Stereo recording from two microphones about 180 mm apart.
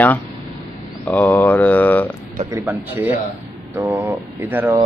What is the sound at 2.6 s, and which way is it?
Speech, 10° right (ahead or behind).